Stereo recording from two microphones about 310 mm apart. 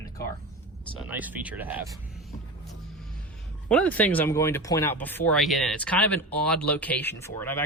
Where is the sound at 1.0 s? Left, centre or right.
Centre.